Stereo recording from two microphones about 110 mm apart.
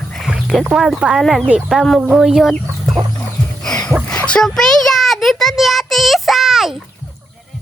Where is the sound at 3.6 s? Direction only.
5° left (ahead or behind).